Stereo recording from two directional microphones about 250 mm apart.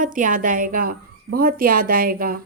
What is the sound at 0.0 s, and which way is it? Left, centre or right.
A woman's voice, right.